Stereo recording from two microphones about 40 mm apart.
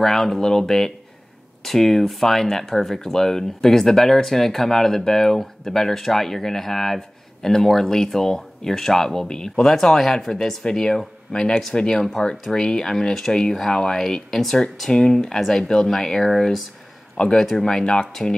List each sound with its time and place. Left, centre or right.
0.0 s speech: centre
14.9 s speech: centre
17.2 s speech: centre